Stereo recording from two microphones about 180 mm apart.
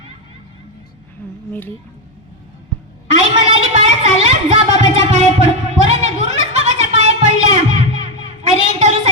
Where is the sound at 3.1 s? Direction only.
90° left.